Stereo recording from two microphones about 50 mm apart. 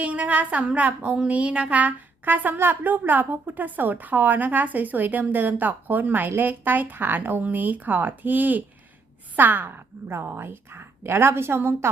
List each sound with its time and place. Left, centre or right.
0.0 s a woman's voice: right